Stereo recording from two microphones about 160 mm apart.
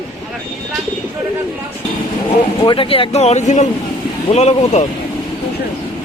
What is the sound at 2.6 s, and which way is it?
Speech, 35° left (ahead or behind).